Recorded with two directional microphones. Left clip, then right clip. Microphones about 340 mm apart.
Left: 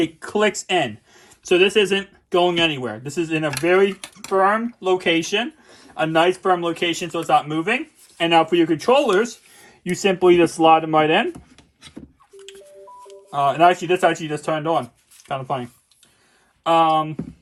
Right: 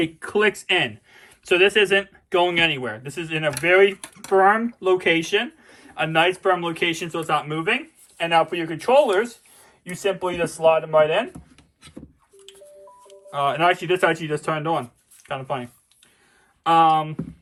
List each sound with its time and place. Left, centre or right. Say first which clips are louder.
0.0 s speech: left 1 dB; centre
5.9 s a man's voice: left 2 dB; centre
12.4 s music: left 3 dB; centre
13.3 s speech: left 4 dB; centre